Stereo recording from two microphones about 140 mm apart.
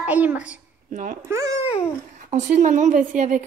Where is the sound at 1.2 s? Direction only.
20° right (ahead or behind).